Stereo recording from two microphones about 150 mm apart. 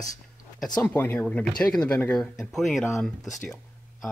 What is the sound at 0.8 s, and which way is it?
Speech, 10° left (ahead or behind).